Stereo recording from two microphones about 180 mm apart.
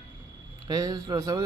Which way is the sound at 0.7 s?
20° right (ahead or behind).